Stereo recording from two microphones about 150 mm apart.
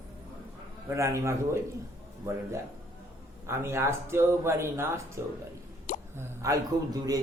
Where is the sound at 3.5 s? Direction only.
15° right (ahead or behind).